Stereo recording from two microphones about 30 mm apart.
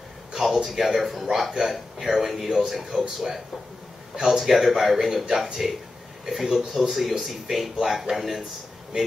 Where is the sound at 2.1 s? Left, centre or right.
Centre.